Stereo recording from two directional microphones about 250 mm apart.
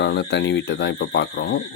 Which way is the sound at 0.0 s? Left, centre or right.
Left.